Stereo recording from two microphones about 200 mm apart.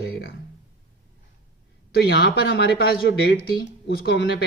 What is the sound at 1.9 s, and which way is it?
A man's voice, 55° left (ahead or behind).